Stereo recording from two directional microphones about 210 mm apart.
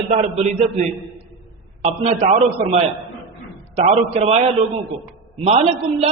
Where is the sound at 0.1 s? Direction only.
30° right (ahead or behind).